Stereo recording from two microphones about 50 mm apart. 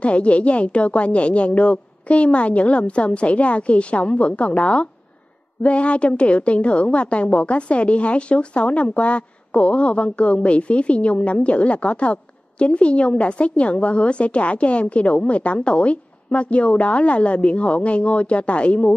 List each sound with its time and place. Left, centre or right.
0.0 s a woman's voice: left